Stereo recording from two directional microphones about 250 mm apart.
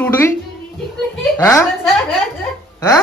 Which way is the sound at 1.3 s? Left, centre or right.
Centre.